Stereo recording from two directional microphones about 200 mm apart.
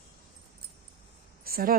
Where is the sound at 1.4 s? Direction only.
45° right (ahead or behind).